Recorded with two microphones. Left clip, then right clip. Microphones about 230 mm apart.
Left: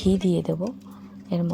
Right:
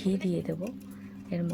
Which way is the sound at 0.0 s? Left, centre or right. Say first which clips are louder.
Left 8 dB; left.